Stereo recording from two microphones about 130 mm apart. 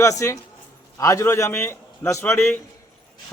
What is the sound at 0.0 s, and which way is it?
A man's voice, 25° left (ahead or behind).